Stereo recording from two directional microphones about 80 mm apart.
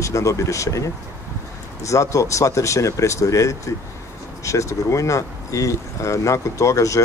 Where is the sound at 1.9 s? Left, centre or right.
Left.